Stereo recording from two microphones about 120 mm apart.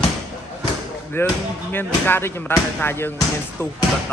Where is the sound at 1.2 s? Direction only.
20° left (ahead or behind).